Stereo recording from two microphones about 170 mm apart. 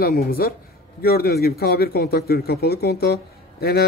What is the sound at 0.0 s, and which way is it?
A man's voice, 60° left (ahead or behind).